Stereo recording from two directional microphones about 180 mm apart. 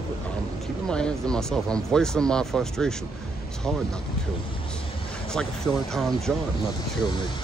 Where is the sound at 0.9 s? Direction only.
5° left (ahead or behind).